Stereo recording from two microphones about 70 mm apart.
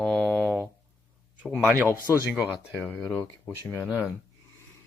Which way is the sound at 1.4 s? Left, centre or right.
Centre.